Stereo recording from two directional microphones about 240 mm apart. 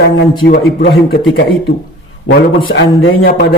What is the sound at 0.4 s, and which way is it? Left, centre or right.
Speech, left.